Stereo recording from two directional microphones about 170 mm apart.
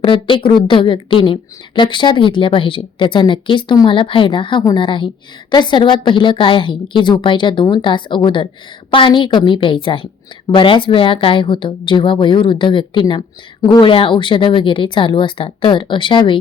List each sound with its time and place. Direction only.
0.0 s a woman's voice: 30° left (ahead or behind)